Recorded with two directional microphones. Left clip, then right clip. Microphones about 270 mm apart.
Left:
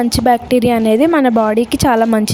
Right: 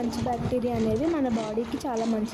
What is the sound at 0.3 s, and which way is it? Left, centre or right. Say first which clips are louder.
A woman's voice: left 17 dB; left.